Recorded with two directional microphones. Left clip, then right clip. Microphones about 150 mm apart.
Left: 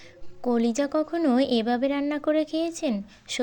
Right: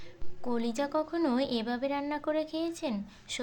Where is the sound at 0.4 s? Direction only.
30° left (ahead or behind).